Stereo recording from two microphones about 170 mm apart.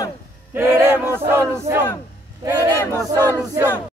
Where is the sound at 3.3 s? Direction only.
15° right (ahead or behind).